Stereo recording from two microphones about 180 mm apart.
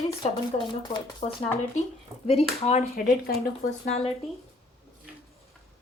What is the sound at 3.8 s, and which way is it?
Speech, 35° left (ahead or behind).